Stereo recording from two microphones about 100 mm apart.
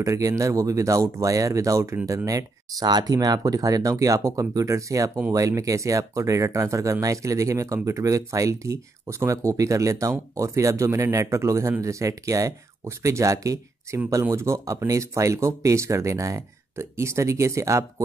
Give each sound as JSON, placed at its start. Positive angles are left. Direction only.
{"t": 0.0, "sound": "speech", "side_deg": -30}